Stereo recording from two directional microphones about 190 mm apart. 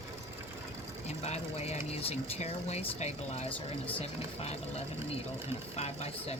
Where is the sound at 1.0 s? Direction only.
35° left (ahead or behind).